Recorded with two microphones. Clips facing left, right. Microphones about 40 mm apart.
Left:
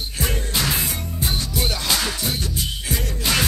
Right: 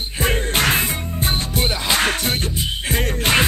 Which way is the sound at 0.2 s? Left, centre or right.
Right.